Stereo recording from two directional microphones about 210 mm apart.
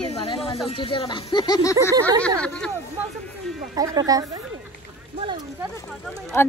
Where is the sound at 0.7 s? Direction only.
25° left (ahead or behind); by 2.7 s 5° left (ahead or behind).